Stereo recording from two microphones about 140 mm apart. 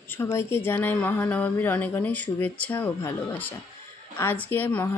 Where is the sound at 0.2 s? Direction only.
20° left (ahead or behind).